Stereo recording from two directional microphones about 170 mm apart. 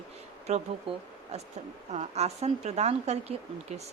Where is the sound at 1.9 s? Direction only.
40° right (ahead or behind).